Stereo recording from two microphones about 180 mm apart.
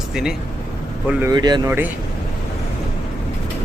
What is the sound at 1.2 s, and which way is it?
Speech, 20° right (ahead or behind).